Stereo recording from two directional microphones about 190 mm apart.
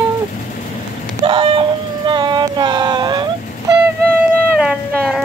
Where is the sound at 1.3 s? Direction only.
25° right (ahead or behind).